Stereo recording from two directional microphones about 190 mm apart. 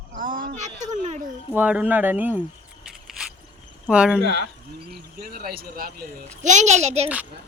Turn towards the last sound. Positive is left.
turn(degrees=-35)  # may be behind; listen again after turning